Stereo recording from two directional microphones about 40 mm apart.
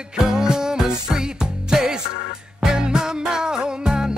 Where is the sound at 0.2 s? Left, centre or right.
Centre.